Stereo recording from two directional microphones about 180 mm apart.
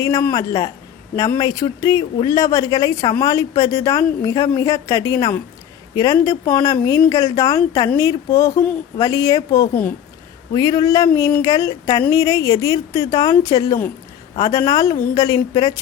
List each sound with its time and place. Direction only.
0.0 s speech: 20° left (ahead or behind)